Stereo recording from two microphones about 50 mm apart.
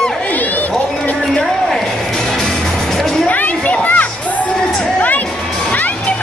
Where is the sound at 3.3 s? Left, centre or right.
Left.